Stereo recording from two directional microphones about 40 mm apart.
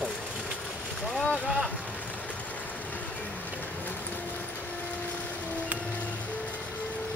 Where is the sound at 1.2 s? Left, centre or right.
Left.